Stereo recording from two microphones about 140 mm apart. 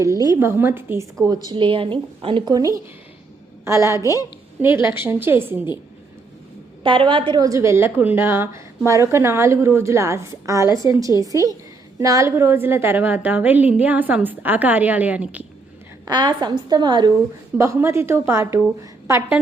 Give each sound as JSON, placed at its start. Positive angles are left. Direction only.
{"t": 0.0, "sound": "a woman's voice", "side_deg": -25}
{"t": 1.2, "sound": "a woman's voice", "side_deg": -30}
{"t": 4.0, "sound": "a woman's voice", "side_deg": 25}
{"t": 4.6, "sound": "a woman's voice", "side_deg": -15}
{"t": 6.8, "sound": "a woman's voice", "side_deg": -35}
{"t": 16.0, "sound": "a woman's voice", "side_deg": -30}
{"t": 17.6, "sound": "a woman's voice", "side_deg": -20}